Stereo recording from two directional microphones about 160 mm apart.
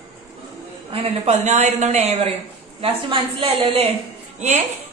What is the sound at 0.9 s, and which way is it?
A woman's voice, 40° right (ahead or behind).